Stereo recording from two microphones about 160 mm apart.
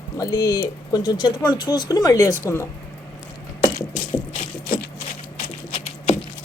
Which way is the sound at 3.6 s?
50° left (ahead or behind).